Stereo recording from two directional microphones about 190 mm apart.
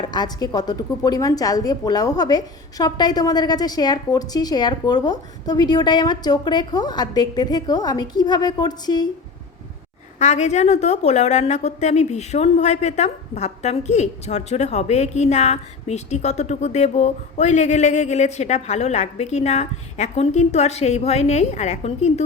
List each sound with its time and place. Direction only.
0.0 s a woman's voice: 20° left (ahead or behind)
10.2 s a woman's voice: 40° left (ahead or behind)